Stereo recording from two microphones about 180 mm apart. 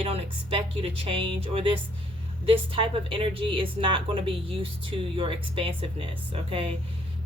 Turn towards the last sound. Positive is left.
turn(degrees=-30)  # may be behind; listen again after turning